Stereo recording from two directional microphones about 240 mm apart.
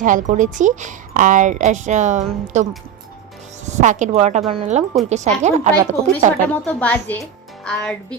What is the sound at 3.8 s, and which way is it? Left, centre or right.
A woman's voice, right.